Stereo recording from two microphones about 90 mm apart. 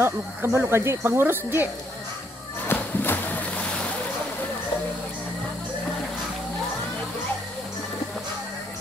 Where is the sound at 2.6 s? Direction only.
20° left (ahead or behind).